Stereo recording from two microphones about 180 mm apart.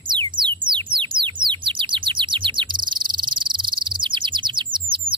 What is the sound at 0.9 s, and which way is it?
Bird, 25° right (ahead or behind).